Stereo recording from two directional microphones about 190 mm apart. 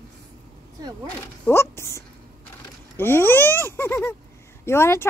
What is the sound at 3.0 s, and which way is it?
Speech, 10° left (ahead or behind).